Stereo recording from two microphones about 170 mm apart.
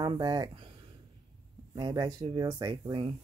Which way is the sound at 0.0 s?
25° right (ahead or behind).